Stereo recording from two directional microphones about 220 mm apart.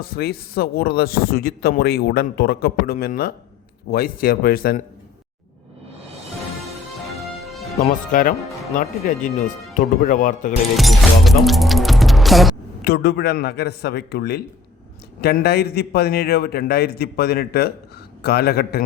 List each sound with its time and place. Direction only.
0.0 s speech: 45° left (ahead or behind)
8.1 s speech: 40° left (ahead or behind)
10.8 s speech: centre (ahead or behind)
12.8 s speech: 50° left (ahead or behind)